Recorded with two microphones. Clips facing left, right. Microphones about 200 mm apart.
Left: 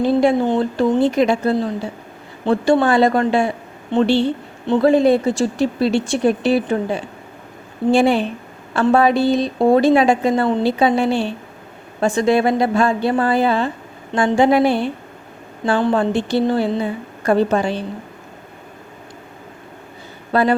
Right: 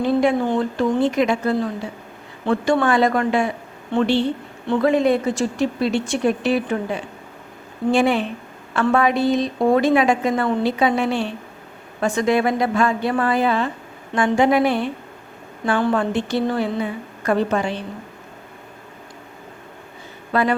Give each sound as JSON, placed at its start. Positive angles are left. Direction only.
{"t": 0.0, "sound": "a woman's voice", "side_deg": 30}
{"t": 20.3, "sound": "a woman's voice", "side_deg": 35}